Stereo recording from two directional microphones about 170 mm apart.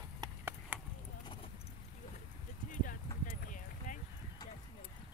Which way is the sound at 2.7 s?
50° left (ahead or behind).